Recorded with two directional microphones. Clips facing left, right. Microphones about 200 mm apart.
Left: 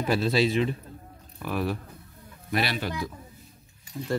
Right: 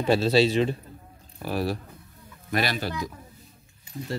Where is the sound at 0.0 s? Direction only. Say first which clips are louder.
Right 3 dB; 30° right (ahead or behind); by 2.9 s 45° right (ahead or behind).